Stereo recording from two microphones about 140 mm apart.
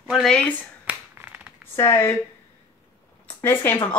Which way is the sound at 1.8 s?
20° left (ahead or behind).